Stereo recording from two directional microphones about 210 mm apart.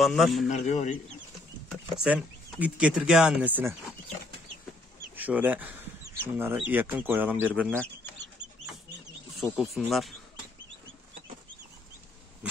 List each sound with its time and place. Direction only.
0.0 s speech: centre (ahead or behind)
0.5 s speech: 35° left (ahead or behind)
1.7 s speech: centre (ahead or behind)
5.1 s speech: 10° right (ahead or behind)
7.7 s speech: 5° left (ahead or behind)
9.4 s speech: centre (ahead or behind)